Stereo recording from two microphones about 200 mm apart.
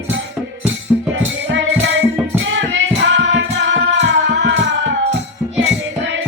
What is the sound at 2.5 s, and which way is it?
Music, 65° right (ahead or behind).